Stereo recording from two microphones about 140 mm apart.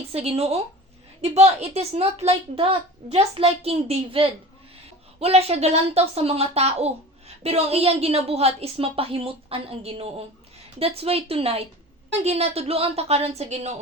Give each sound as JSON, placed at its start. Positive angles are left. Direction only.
{"t": 0.1, "sound": "a woman's voice", "side_deg": -45}